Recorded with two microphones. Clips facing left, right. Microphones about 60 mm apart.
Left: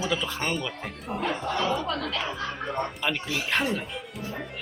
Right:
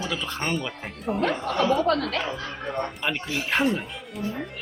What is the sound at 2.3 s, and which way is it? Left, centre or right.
Speech, centre.